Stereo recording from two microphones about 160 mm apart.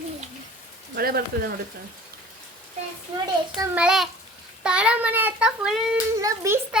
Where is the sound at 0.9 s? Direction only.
65° right (ahead or behind).